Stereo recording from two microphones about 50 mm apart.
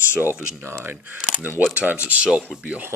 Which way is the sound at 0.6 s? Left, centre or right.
Right.